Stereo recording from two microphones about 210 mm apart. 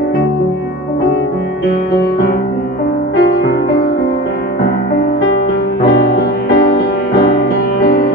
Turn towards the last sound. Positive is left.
turn(degrees=50)  # may be behind; listen again after turning